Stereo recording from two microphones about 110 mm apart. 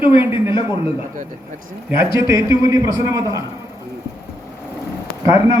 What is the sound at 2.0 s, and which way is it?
A man's voice, 25° right (ahead or behind).